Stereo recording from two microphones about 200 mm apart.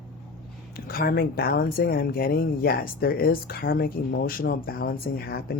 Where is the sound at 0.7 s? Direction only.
50° left (ahead or behind).